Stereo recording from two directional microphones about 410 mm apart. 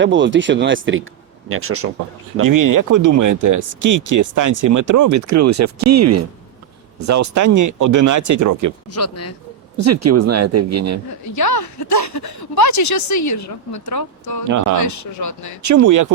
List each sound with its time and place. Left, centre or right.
0.0 s speech: right
2.5 s speech: right
8.9 s speech: left
9.7 s speech: right
11.3 s a woman's voice: left
15.6 s speech: right